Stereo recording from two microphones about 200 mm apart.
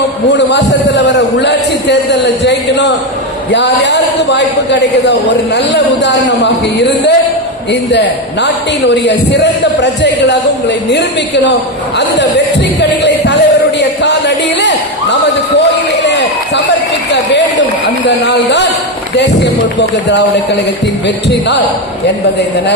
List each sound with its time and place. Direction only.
0.3 s a man's voice: 60° left (ahead or behind)
13.0 s a sound: 60° left (ahead or behind)
18.2 s a man's voice: 55° left (ahead or behind)